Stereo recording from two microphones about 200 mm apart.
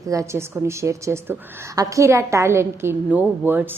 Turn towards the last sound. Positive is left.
turn(degrees=-10)  # may be behind; listen again after turning